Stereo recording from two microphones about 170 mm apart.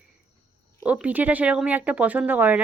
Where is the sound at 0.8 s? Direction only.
10° right (ahead or behind).